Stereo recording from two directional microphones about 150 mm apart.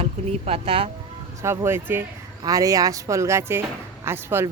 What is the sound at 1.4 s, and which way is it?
Speech, 15° right (ahead or behind).